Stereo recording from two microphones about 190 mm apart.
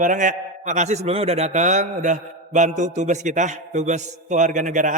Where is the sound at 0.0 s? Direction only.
45° right (ahead or behind).